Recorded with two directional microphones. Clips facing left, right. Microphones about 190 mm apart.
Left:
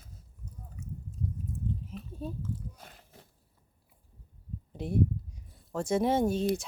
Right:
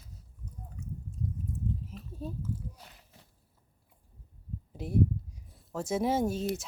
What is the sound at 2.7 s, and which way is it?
Biting, 50° left (ahead or behind).